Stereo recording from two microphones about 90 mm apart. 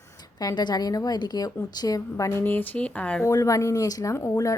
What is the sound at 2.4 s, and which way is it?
Speech, 20° left (ahead or behind).